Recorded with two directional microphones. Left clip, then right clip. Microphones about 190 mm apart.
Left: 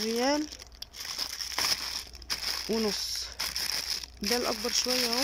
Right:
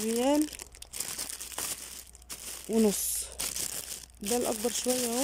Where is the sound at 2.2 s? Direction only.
25° right (ahead or behind).